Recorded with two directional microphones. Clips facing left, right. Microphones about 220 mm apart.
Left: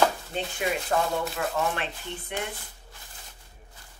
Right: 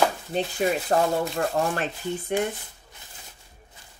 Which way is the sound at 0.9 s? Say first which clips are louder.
Right 4 dB; 45° right (ahead or behind).